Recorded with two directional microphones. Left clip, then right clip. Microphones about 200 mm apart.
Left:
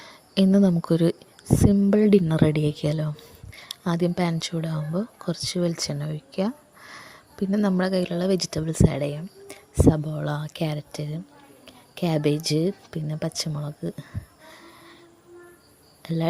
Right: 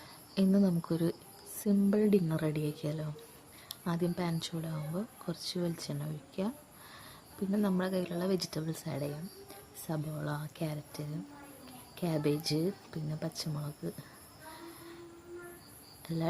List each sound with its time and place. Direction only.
0.0 s speech: 35° left (ahead or behind)
16.0 s speech: 35° left (ahead or behind)